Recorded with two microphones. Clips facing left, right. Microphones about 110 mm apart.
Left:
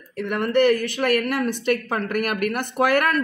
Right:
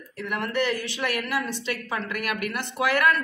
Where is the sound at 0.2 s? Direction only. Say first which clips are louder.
Left 8 dB; 55° left (ahead or behind).